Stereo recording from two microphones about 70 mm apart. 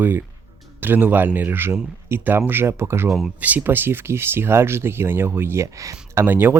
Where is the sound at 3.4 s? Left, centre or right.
Right.